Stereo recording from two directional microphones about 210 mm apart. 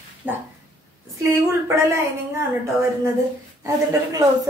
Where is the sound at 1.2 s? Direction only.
10° right (ahead or behind).